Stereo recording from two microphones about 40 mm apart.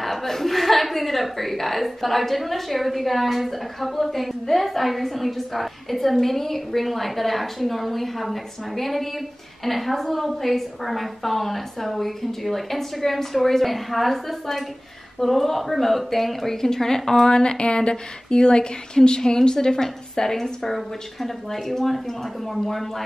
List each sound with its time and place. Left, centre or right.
0.0 s a woman's voice: centre
17.3 s a woman's voice: left; by 23.0 s centre